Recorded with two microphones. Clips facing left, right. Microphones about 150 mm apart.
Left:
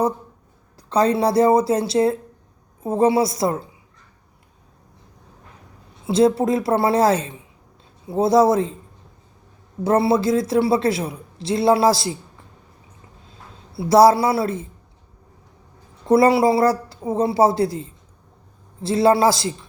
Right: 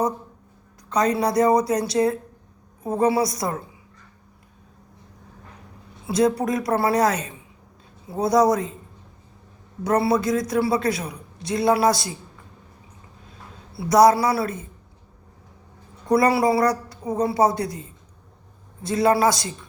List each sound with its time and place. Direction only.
0.9 s a woman's voice: 30° left (ahead or behind)
6.1 s a woman's voice: 25° left (ahead or behind)
9.8 s a woman's voice: 25° left (ahead or behind)
13.9 s a woman's voice: 30° left (ahead or behind)
16.0 s a woman's voice: 25° left (ahead or behind)